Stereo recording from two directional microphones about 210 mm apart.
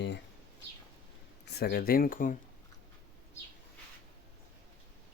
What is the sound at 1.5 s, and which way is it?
Speech, 50° left (ahead or behind).